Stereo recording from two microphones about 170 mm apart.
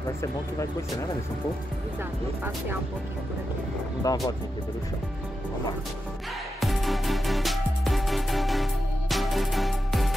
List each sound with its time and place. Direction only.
4.1 s speech: 20° left (ahead or behind)
6.6 s music: centre (ahead or behind)